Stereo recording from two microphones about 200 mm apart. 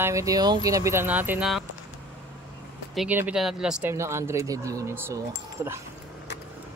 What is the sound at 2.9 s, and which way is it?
Speech, 5° right (ahead or behind).